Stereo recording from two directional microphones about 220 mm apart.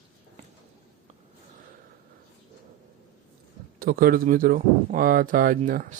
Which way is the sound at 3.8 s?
45° right (ahead or behind).